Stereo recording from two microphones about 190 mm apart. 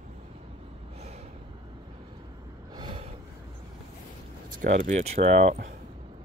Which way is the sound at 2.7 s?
25° right (ahead or behind).